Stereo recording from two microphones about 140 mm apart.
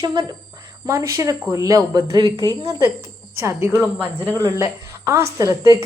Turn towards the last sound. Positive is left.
turn(degrees=-25)  # may be behind; listen again after turning